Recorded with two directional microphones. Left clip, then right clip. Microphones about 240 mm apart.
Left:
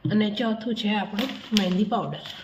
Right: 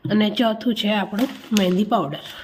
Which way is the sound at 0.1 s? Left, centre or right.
Right.